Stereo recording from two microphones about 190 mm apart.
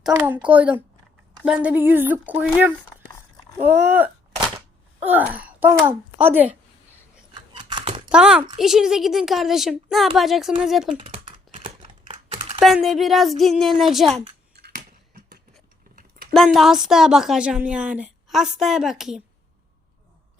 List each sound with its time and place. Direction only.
0.0 s speech: 10° right (ahead or behind)
7.5 s a sound: 25° right (ahead or behind)
8.1 s speech: 5° right (ahead or behind)
10.9 s typing: 30° right (ahead or behind)
12.5 s speech: centre (ahead or behind)
16.0 s a sound: 55° right (ahead or behind)
16.3 s speech: centre (ahead or behind)